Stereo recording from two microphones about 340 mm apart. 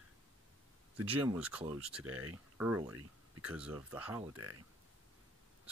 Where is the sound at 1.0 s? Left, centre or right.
Centre.